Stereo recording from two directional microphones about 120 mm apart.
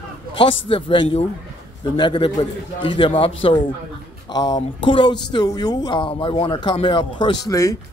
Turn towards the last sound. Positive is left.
turn(degrees=25)  # may be behind; listen again after turning